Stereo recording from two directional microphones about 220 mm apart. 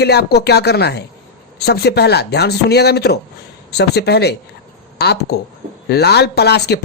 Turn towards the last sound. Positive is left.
turn(degrees=50)  # may be behind; listen again after turning